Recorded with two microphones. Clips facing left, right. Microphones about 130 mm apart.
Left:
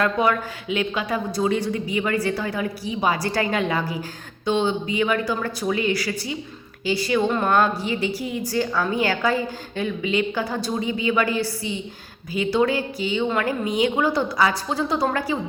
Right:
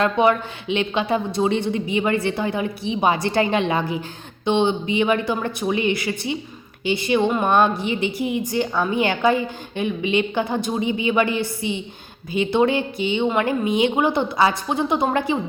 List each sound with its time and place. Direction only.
0.0 s a woman's voice: 25° right (ahead or behind)